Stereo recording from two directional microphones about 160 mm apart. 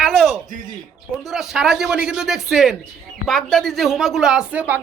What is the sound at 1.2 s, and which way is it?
Speech, 5° right (ahead or behind).